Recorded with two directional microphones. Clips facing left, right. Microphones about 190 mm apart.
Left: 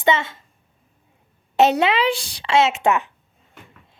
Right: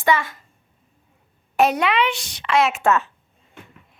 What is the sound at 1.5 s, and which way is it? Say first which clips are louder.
A woman's voice: left 2 dB; 25° left (ahead or behind).